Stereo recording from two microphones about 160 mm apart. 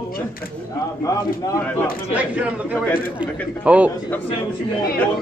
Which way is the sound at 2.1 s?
10° right (ahead or behind).